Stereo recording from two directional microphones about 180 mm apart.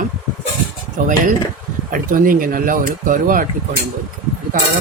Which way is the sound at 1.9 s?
50° right (ahead or behind).